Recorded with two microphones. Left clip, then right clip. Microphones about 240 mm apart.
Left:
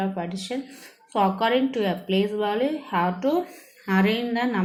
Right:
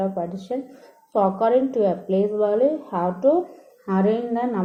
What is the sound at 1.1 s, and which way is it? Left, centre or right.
A woman's voice, left.